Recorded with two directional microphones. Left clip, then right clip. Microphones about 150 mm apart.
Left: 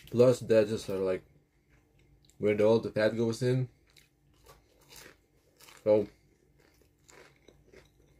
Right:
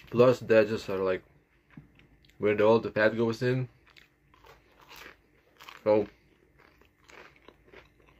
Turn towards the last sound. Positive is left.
turn(degrees=35)  # may be behind; listen again after turning